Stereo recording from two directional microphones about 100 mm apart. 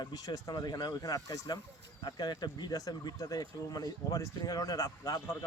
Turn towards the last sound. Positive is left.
turn(degrees=35)  # may be behind; listen again after turning